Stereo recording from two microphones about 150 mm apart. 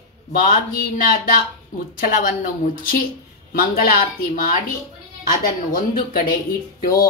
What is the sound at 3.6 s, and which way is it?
Speech, 65° left (ahead or behind).